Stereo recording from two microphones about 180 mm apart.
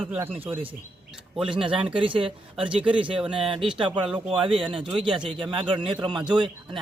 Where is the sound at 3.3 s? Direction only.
30° right (ahead or behind).